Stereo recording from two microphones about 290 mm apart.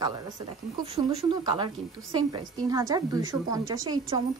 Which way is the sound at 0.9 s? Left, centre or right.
Centre.